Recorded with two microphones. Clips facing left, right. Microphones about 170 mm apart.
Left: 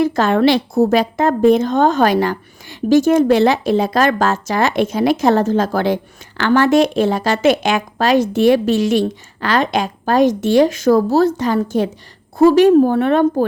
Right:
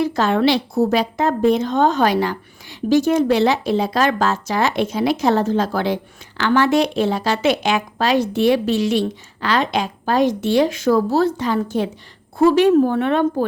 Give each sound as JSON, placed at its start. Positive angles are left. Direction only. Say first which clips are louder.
{"t": 0.0, "sound": "a woman's voice", "louder": "left 3 dB", "side_deg": 50}